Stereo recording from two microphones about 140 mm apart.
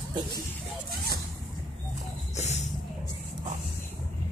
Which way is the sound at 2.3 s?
55° left (ahead or behind).